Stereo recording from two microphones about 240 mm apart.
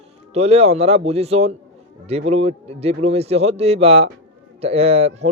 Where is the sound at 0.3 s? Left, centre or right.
Right.